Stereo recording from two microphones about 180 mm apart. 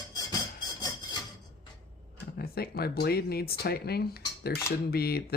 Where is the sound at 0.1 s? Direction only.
20° left (ahead or behind).